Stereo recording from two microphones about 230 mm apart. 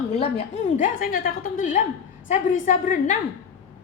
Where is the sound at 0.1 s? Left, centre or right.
Left.